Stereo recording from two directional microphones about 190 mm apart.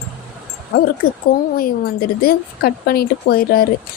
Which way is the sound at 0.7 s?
55° left (ahead or behind).